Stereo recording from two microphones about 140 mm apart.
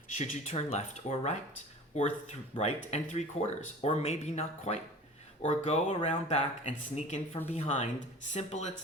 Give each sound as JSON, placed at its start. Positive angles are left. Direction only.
{"t": 0.2, "sound": "speech", "side_deg": 50}